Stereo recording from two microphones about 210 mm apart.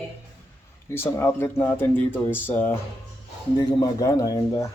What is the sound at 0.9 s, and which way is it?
Speech, 10° left (ahead or behind).